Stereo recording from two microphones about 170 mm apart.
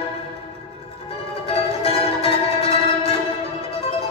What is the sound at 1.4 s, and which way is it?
Music, 35° left (ahead or behind).